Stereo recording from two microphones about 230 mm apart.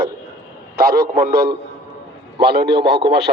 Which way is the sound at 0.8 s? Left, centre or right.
Right.